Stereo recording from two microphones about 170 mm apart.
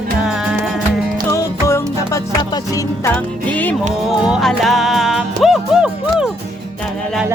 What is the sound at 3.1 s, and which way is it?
Music, 10° left (ahead or behind).